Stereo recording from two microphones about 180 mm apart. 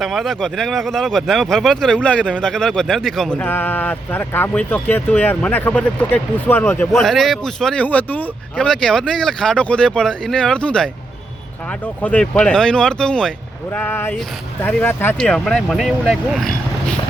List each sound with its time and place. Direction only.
0.0 s speech: centre (ahead or behind)
12.0 s speech: 5° left (ahead or behind)